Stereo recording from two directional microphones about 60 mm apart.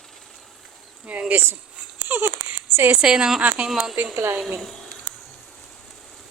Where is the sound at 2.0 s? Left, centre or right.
Right.